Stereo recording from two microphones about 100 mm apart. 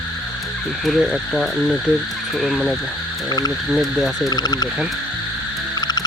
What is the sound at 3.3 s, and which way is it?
Speech, 40° left (ahead or behind).